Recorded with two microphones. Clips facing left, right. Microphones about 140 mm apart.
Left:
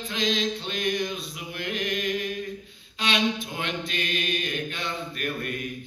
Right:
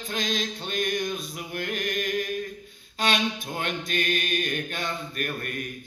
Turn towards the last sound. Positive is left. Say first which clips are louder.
# left 1 dB
turn(degrees=-45)  # may be behind; listen again after turning